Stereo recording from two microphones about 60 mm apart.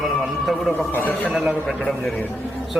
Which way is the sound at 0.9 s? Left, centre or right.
Left.